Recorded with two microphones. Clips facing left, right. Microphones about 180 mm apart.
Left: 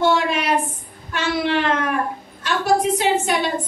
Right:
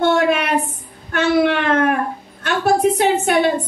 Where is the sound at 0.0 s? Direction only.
60° right (ahead or behind).